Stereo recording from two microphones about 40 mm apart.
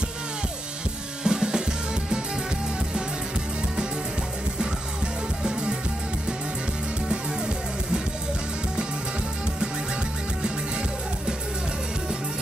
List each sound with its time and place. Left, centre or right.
1.2 s drum kit: centre
4.6 s music: right
7.1 s music: right